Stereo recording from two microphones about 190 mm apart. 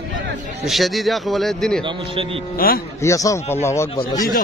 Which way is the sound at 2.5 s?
50° left (ahead or behind).